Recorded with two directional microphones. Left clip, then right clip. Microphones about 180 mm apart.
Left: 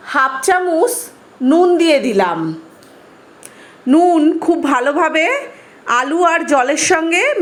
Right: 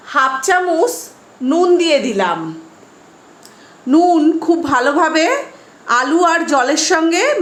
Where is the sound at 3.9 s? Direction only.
5° left (ahead or behind).